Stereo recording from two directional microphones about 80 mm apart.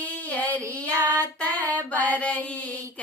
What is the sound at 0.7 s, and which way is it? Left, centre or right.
Child singing, centre.